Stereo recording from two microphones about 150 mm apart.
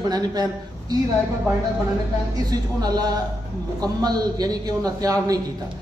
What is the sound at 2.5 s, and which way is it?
Speech, 25° right (ahead or behind).